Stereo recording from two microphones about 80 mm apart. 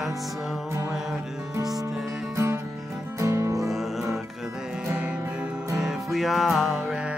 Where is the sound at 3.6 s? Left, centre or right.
Centre.